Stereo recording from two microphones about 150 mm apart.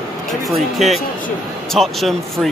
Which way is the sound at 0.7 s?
Centre (ahead or behind).